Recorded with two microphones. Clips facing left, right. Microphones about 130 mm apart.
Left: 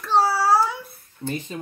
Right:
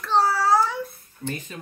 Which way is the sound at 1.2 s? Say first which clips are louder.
Left 2 dB; 25° left (ahead or behind).